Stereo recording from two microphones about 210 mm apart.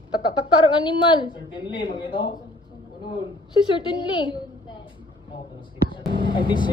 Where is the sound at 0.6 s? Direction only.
20° left (ahead or behind).